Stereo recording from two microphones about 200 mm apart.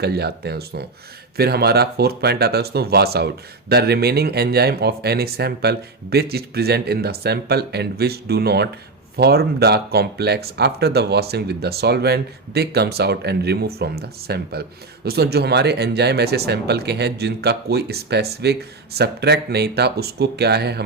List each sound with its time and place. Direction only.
0.0 s speech: 55° right (ahead or behind)